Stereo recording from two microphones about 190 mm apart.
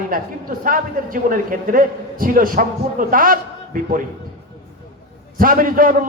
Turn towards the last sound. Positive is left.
turn(degrees=-45)  # may be behind; listen again after turning